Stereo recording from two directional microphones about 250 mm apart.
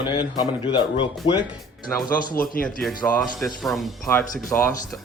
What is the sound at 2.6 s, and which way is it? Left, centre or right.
Speech, centre.